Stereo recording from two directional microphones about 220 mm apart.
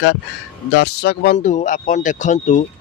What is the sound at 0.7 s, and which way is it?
Speech, 50° left (ahead or behind).